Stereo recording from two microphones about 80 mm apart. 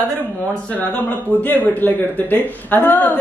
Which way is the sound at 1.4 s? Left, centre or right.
Left.